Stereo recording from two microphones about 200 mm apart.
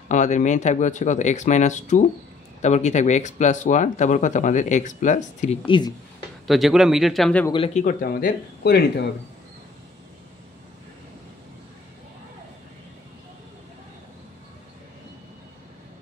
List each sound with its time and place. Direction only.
0.1 s speech: 40° left (ahead or behind)
5.7 s speech: 20° left (ahead or behind)
6.4 s speech: centre (ahead or behind)
7.5 s speech: 30° left (ahead or behind)
7.8 s speech: 45° left (ahead or behind)